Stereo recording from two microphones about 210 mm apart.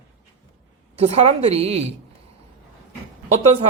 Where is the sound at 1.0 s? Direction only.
30° right (ahead or behind).